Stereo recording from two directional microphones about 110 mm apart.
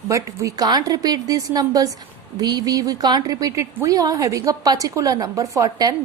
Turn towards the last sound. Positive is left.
turn(degrees=-30)  # may be behind; listen again after turning